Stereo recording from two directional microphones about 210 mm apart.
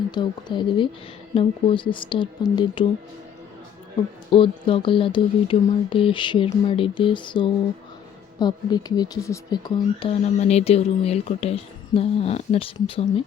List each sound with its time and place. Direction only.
0.1 s speech: 20° left (ahead or behind)
4.3 s speech: 25° left (ahead or behind)